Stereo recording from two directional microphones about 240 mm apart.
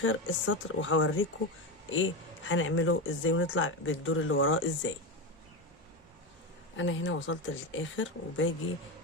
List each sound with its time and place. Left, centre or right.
0.0 s speech: left
6.7 s speech: left